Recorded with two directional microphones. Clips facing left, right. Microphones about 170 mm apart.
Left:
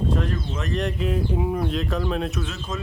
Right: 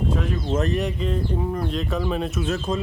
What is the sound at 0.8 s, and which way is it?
Speech, centre (ahead or behind).